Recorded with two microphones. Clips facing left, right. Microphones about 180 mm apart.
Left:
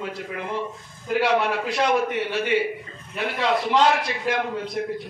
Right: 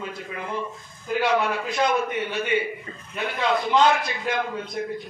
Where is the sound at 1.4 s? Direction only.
75° left (ahead or behind).